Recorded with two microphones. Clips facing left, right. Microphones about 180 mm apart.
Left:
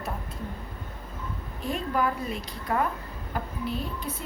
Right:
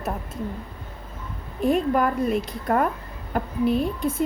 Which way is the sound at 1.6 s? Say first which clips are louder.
Right 7 dB; 55° right (ahead or behind).